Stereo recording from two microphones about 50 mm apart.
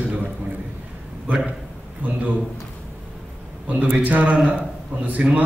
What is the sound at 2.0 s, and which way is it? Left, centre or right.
Speech, right.